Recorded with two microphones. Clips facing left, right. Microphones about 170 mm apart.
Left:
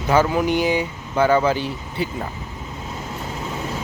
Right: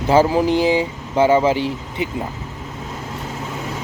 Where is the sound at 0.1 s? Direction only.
30° right (ahead or behind).